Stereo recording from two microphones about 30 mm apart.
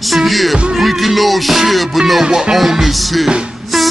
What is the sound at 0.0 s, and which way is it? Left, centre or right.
Music, centre.